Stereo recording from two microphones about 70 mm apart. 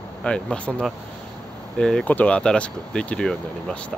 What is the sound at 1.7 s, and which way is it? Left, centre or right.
Speech, centre.